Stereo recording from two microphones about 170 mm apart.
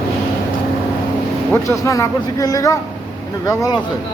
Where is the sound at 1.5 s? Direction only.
15° left (ahead or behind).